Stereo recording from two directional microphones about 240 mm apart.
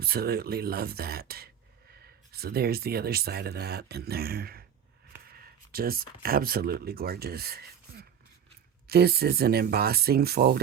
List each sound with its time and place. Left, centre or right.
0.0 s speech: right